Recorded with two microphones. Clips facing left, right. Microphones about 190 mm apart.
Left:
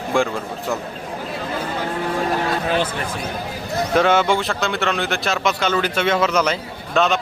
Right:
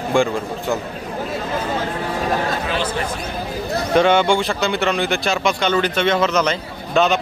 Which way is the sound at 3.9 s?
5° left (ahead or behind).